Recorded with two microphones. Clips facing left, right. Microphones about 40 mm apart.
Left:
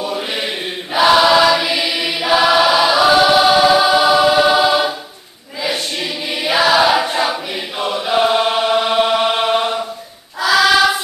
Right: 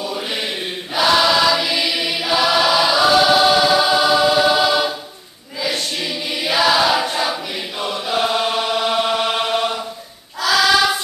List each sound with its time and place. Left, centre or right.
0.0 s chant: centre
0.9 s choir: centre
6.3 s choir: centre
7.8 s chant: centre
10.4 s child singing: centre